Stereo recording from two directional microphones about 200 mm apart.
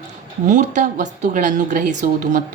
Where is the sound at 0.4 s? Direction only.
40° right (ahead or behind).